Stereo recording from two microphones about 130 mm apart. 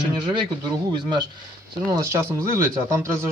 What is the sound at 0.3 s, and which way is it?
Speech, 35° right (ahead or behind).